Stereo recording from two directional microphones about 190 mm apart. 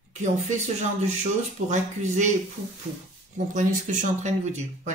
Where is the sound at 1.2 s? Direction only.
40° right (ahead or behind).